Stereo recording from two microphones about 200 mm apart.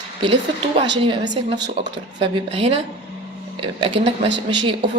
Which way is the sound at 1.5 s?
60° right (ahead or behind).